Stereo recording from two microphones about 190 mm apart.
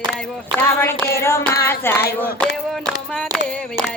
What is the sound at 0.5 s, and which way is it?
Speech, 10° left (ahead or behind).